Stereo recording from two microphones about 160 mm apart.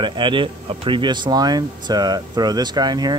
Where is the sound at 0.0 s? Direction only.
30° right (ahead or behind).